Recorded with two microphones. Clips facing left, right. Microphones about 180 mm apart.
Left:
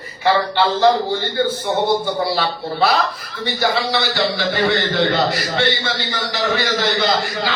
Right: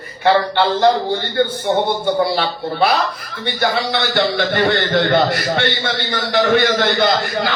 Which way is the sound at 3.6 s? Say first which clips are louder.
Right 1 dB; 55° right (ahead or behind).